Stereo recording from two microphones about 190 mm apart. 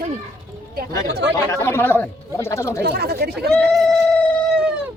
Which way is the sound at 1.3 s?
15° left (ahead or behind).